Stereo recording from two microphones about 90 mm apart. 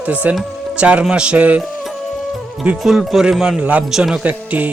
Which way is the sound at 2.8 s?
5° right (ahead or behind).